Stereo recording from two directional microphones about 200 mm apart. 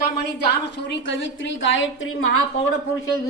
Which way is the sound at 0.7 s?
60° left (ahead or behind).